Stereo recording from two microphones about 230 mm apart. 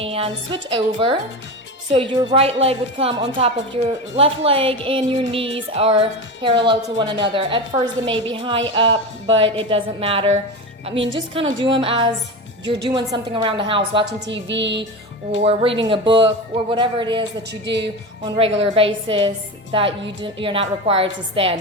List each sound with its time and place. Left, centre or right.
0.0 s a woman's voice: right
14.0 s speech: right
15.4 s a woman's voice: right
17.5 s speech: right
18.3 s a woman's voice: right